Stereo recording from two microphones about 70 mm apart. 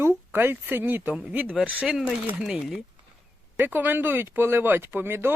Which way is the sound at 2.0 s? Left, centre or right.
Centre.